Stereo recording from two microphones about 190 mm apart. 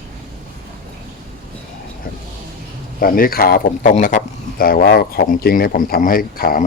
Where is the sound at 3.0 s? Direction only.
50° left (ahead or behind).